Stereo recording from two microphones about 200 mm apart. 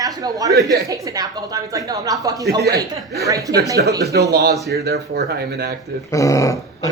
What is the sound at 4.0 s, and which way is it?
Speech, 55° right (ahead or behind).